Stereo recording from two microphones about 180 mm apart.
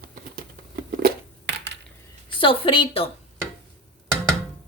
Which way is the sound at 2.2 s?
30° left (ahead or behind).